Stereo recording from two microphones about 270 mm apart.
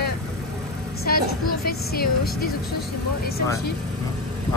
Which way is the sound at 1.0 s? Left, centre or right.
Left.